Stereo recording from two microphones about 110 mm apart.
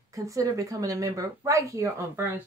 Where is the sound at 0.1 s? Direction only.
30° right (ahead or behind).